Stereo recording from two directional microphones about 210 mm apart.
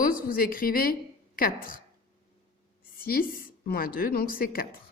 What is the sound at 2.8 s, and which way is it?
A woman's voice, 45° left (ahead or behind).